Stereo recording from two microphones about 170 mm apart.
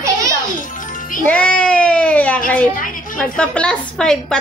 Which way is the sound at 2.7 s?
55° left (ahead or behind).